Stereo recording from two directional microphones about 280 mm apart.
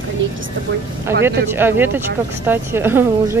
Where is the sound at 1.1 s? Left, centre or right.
Right.